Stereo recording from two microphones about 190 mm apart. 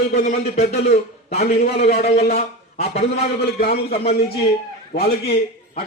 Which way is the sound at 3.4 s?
55° left (ahead or behind).